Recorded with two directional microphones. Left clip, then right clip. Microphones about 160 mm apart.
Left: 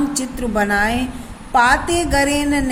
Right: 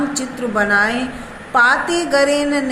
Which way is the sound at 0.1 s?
40° left (ahead or behind).